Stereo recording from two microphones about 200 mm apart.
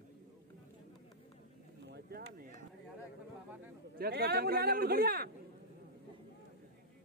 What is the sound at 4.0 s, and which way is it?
A man's voice, 50° right (ahead or behind).